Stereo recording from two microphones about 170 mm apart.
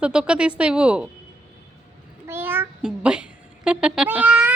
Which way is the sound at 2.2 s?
15° right (ahead or behind).